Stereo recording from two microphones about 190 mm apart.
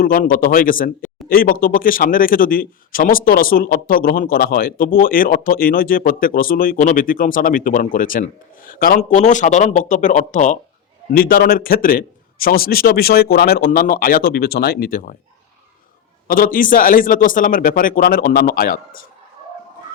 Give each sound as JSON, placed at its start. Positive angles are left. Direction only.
{"t": 0.0, "sound": "a man's voice", "side_deg": 50}
{"t": 16.2, "sound": "a man's voice", "side_deg": 45}